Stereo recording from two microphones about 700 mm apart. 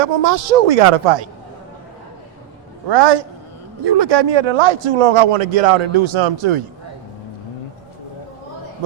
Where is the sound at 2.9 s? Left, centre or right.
Right.